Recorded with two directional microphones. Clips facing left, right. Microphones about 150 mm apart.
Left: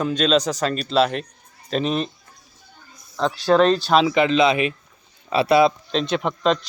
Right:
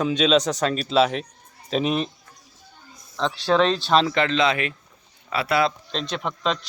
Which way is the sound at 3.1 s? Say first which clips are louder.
Left 3 dB; 5° left (ahead or behind).